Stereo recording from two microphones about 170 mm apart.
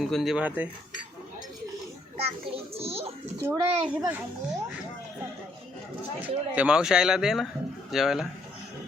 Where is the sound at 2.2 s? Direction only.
35° right (ahead or behind).